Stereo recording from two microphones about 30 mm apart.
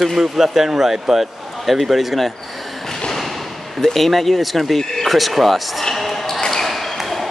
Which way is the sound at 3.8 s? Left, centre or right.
Centre.